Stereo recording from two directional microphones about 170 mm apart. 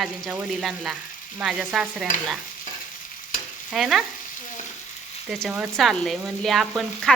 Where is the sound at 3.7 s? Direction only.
Centre (ahead or behind).